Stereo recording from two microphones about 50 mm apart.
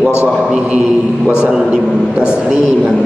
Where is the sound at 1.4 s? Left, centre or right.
Centre.